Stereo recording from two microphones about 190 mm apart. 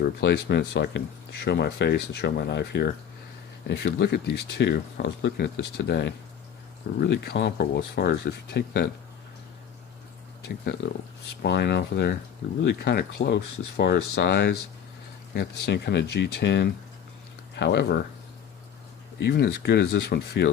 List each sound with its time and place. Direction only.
0.0 s speech: 60° left (ahead or behind)
6.8 s speech: 50° left (ahead or behind)
11.4 s speech: 60° left (ahead or behind)
19.2 s speech: 60° left (ahead or behind)